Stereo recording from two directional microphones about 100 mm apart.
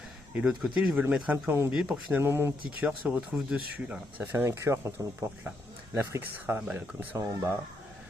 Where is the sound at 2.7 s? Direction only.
15° right (ahead or behind); by 4.9 s 30° right (ahead or behind).